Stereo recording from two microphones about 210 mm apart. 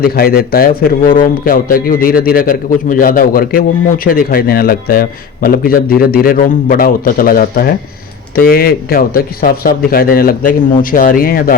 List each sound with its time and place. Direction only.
0.0 s a man's voice: 45° left (ahead or behind)